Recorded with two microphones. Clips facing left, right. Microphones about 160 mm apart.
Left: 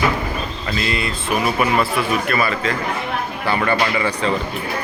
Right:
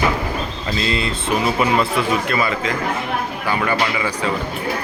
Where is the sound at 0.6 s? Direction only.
25° right (ahead or behind); by 4.3 s 10° right (ahead or behind).